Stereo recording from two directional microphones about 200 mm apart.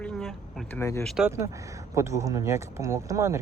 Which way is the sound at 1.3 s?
15° right (ahead or behind).